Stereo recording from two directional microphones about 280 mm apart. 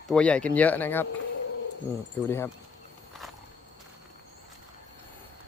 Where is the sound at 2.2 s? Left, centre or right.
Centre.